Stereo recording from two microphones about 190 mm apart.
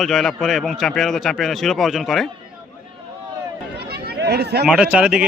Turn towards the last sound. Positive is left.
turn(degrees=-5)  # may be behind; listen again after turning